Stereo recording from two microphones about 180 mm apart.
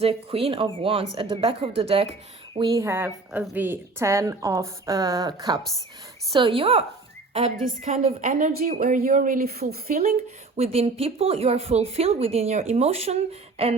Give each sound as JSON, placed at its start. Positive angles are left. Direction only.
{"t": 0.0, "sound": "a woman's voice", "side_deg": -35}
{"t": 2.7, "sound": "a woman's voice", "side_deg": -15}
{"t": 6.3, "sound": "a woman's voice", "side_deg": -30}
{"t": 7.5, "sound": "a woman's voice", "side_deg": -45}
{"t": 10.6, "sound": "a woman's voice", "side_deg": -35}